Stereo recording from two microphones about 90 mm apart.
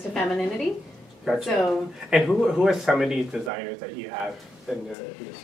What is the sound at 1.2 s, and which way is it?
Speech, centre (ahead or behind).